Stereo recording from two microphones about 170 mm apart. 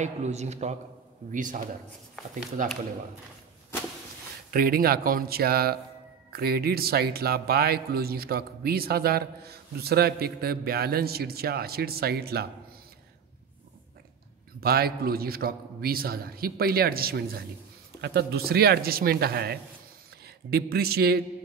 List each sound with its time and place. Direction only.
0.0 s a man's voice: 40° right (ahead or behind)
2.6 s a man's voice: 50° right (ahead or behind)
4.5 s a man's voice: 60° right (ahead or behind)
14.6 s a man's voice: 65° right (ahead or behind)